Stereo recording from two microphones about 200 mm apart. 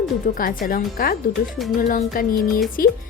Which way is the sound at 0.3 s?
45° left (ahead or behind).